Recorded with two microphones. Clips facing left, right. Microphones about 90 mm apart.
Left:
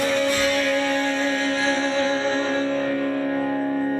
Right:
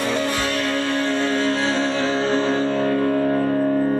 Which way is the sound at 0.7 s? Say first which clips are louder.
Even; 55° right (ahead or behind).